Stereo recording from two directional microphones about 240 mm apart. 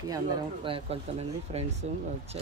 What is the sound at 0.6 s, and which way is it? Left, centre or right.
Speech, right.